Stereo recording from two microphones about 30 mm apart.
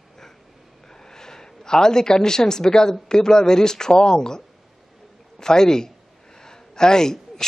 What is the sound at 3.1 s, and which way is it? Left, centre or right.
A woman's voice, left.